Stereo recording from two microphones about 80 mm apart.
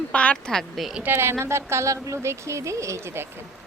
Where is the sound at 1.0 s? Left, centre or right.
Right.